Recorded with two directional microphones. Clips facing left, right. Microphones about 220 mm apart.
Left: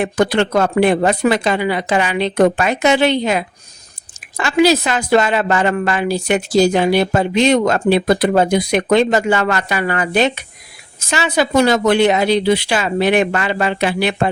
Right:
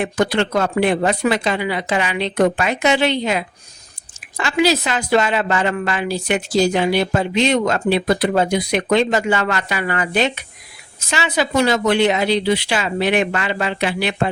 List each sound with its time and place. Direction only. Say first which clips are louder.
0.0 s a woman's voice: left 3 dB; 50° left (ahead or behind)